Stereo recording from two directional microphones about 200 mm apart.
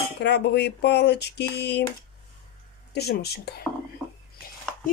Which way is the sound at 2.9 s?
55° left (ahead or behind).